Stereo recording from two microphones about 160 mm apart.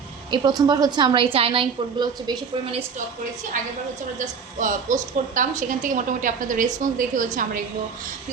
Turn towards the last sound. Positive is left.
turn(degrees=-55)  # may be behind; listen again after turning